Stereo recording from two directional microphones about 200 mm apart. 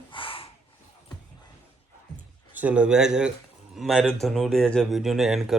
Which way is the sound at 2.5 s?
5° right (ahead or behind).